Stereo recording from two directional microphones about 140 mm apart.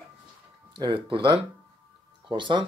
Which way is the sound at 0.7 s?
35° right (ahead or behind).